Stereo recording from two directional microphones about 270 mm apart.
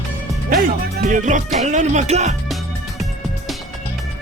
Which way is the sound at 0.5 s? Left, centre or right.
Right.